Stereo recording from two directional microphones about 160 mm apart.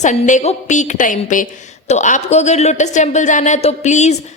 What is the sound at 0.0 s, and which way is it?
A woman's voice, 50° left (ahead or behind).